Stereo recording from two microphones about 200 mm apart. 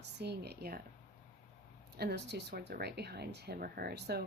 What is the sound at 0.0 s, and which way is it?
Speech, 55° right (ahead or behind).